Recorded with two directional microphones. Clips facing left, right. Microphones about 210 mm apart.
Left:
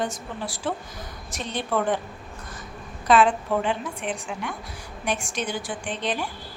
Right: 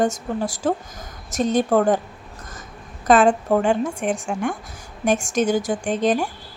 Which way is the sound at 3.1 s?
45° right (ahead or behind).